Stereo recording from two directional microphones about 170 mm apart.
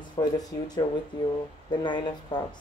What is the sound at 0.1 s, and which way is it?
Speech, 25° left (ahead or behind).